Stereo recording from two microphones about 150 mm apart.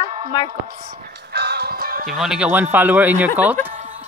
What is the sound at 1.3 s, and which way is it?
Music, 90° right.